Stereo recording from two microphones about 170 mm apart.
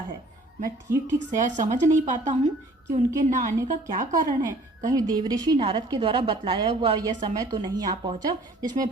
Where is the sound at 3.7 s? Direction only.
50° right (ahead or behind).